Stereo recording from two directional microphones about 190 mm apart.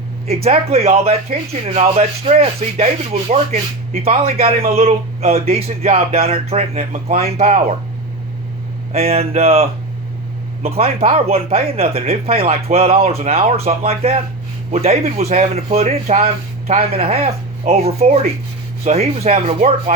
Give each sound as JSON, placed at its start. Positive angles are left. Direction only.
{"t": 0.4, "sound": "speech", "side_deg": -30}
{"t": 8.9, "sound": "speech", "side_deg": -30}